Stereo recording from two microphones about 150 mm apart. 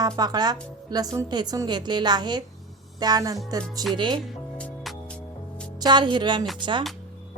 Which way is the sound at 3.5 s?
25° right (ahead or behind).